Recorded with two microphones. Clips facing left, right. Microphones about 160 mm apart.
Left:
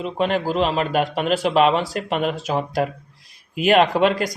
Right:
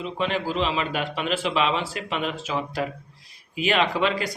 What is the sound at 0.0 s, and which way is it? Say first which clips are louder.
A man's voice: left 5 dB; 50° left (ahead or behind).